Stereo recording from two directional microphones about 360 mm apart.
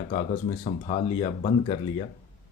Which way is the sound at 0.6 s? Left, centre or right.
Centre.